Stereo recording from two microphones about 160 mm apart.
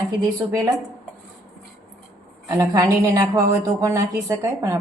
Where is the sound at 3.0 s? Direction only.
20° right (ahead or behind).